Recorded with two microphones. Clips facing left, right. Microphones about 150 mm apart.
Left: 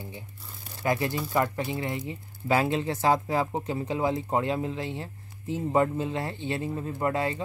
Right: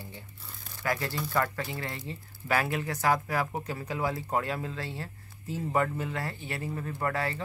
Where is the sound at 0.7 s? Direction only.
20° left (ahead or behind).